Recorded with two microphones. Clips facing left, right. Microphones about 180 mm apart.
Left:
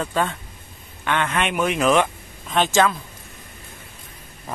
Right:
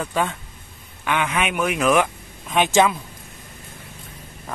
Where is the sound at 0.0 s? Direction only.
10° right (ahead or behind).